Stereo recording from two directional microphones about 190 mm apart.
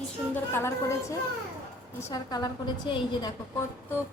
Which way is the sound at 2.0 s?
15° left (ahead or behind).